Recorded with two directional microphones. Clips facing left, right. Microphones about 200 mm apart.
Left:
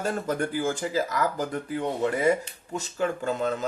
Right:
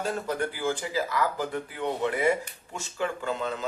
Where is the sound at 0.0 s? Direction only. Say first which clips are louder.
Left 2 dB; 45° left (ahead or behind).